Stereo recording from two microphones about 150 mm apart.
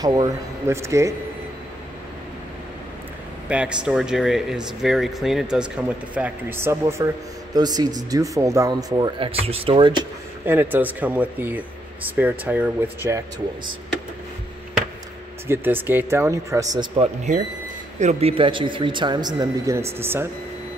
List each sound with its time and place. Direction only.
0.0 s speech: 25° right (ahead or behind)
3.4 s speech: 5° right (ahead or behind); by 10.0 s 35° right (ahead or behind)
10.4 s speech: 15° right (ahead or behind)
15.4 s speech: 15° right (ahead or behind)
17.3 s a man's voice: 50° right (ahead or behind)
18.0 s speech: 40° right (ahead or behind); by 20.2 s 15° right (ahead or behind)